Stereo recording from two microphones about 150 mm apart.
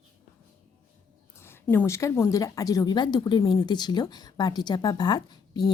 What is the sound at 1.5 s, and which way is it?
A woman's voice, 10° left (ahead or behind).